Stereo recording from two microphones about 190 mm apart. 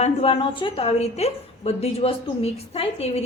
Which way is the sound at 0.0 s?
30° left (ahead or behind).